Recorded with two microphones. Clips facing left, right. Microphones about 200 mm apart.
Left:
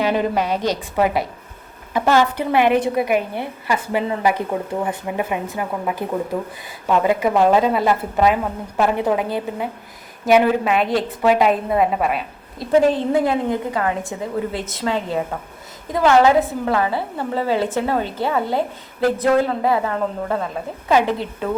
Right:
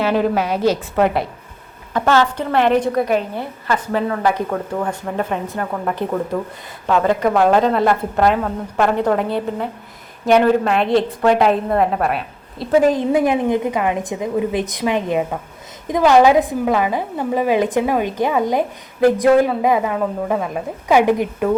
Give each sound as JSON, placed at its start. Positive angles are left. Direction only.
{"t": 0.1, "sound": "a woman's voice", "side_deg": -5}
{"t": 0.9, "sound": "a woman's voice", "side_deg": 5}
{"t": 12.8, "sound": "a woman's voice", "side_deg": -15}